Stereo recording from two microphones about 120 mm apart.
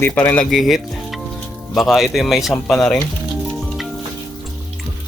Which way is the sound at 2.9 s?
5° left (ahead or behind).